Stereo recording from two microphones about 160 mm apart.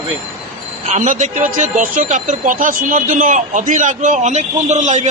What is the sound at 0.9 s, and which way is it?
Speech, 50° right (ahead or behind).